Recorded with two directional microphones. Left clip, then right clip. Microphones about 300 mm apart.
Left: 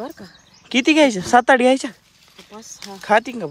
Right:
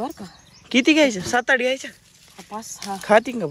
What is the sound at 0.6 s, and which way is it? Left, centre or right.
Speech, centre.